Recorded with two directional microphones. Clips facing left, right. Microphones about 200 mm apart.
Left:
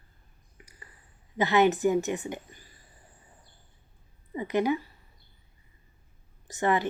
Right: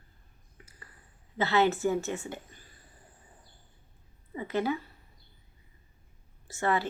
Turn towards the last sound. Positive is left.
turn(degrees=20)  # may be behind; listen again after turning